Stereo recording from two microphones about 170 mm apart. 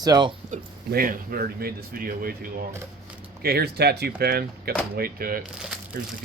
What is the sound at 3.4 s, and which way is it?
Speech, 70° right (ahead or behind).